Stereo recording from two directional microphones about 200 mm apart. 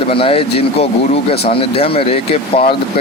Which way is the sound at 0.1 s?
30° left (ahead or behind).